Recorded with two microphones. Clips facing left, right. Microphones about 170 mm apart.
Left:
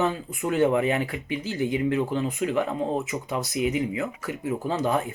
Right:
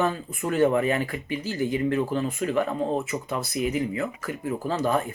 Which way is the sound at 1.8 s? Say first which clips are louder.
Even; 15° left (ahead or behind).